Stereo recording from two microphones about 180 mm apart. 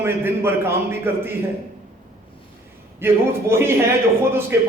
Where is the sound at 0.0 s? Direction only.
15° right (ahead or behind).